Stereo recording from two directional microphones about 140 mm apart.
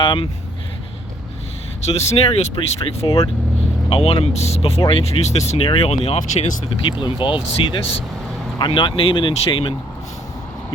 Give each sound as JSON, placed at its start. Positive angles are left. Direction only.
{"t": 0.0, "sound": "speech", "side_deg": 40}
{"t": 1.8, "sound": "speech", "side_deg": 50}
{"t": 7.0, "sound": "speech", "side_deg": 35}